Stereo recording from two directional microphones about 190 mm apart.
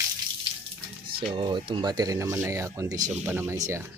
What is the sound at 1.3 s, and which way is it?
Speech, 25° right (ahead or behind).